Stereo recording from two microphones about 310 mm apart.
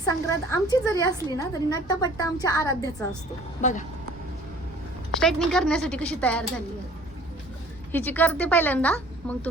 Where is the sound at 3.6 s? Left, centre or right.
Left.